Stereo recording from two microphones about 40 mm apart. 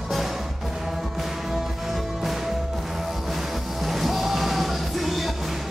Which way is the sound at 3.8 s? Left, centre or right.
Centre.